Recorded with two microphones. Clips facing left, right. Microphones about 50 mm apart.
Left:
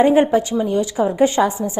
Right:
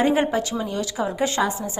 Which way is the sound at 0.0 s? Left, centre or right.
Left.